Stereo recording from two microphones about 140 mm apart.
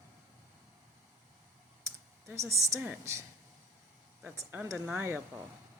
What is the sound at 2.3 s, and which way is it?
Speech, 20° right (ahead or behind).